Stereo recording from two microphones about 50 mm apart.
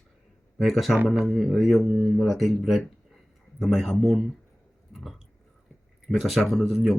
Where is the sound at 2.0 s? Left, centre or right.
Centre.